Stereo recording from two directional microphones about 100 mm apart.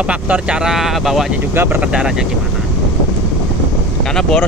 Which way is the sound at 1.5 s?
20° right (ahead or behind).